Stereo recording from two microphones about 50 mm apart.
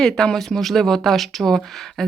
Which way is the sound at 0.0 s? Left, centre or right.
Centre.